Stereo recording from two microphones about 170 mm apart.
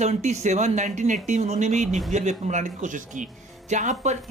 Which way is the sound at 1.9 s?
Centre (ahead or behind).